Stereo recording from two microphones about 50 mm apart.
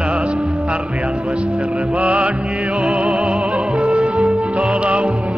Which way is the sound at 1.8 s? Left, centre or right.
Right.